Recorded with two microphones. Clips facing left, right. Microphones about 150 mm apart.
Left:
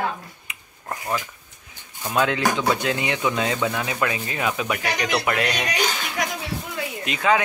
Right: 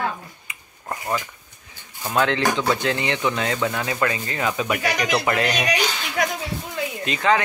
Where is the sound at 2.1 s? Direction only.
10° left (ahead or behind).